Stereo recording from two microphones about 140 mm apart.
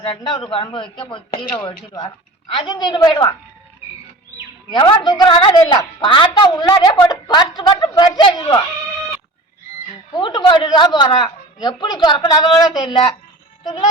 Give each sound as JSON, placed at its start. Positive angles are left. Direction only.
{"t": 0.0, "sound": "a woman's voice", "side_deg": 35}
{"t": 4.7, "sound": "a woman's voice", "side_deg": 35}
{"t": 10.2, "sound": "a woman's voice", "side_deg": 35}